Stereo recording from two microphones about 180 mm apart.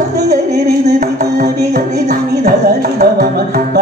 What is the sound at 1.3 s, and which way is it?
Music, 50° right (ahead or behind).